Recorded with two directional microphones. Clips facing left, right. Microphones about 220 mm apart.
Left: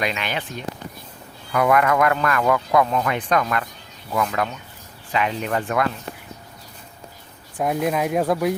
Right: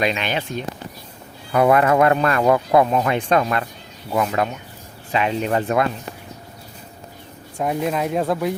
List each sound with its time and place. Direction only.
0.0 s speech: 25° right (ahead or behind)
1.5 s speech: 25° right (ahead or behind)
7.6 s speech: 5° left (ahead or behind)